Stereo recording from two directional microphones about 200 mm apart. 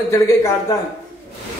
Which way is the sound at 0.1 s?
15° left (ahead or behind).